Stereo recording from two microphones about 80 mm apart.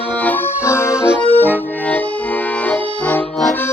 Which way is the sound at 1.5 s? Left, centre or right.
Left.